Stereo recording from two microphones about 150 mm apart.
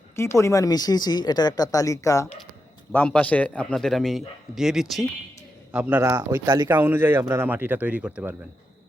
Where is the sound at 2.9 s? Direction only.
10° left (ahead or behind); by 6.0 s 10° right (ahead or behind).